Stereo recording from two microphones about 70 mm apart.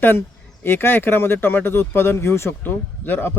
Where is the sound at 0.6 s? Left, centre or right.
Left.